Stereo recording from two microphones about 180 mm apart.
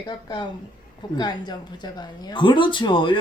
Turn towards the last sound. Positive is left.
turn(degrees=25)  # may be behind; listen again after turning